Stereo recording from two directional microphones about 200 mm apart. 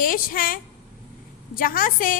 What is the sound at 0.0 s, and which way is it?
A woman's voice, 45° left (ahead or behind).